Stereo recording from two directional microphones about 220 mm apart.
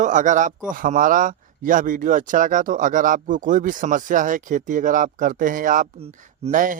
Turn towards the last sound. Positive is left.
turn(degrees=-35)  # may be behind; listen again after turning